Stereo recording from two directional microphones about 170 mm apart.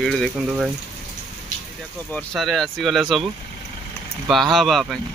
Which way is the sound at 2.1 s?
Centre (ahead or behind).